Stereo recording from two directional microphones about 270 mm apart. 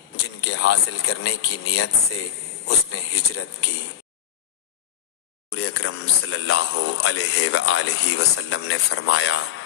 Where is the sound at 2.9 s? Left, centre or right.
Left.